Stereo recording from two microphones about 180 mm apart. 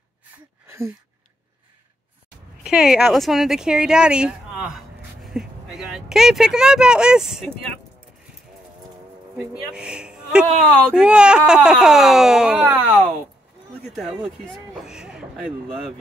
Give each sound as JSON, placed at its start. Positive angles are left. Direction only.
{"t": 2.6, "sound": "speech", "side_deg": -5}
{"t": 9.4, "sound": "speech", "side_deg": -5}
{"t": 13.8, "sound": "speech", "side_deg": -5}